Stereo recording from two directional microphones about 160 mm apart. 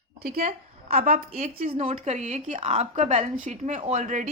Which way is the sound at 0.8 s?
40° right (ahead or behind).